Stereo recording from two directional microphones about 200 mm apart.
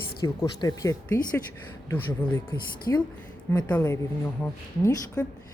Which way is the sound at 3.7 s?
10° left (ahead or behind).